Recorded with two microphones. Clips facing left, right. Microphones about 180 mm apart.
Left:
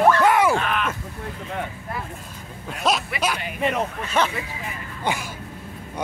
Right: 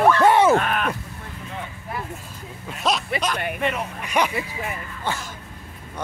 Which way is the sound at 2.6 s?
Centre (ahead or behind).